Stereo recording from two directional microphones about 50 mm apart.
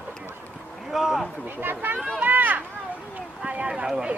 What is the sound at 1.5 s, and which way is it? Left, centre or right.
Speech, right.